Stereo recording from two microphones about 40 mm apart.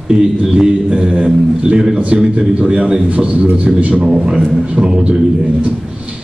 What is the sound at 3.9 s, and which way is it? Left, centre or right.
A man's voice, centre.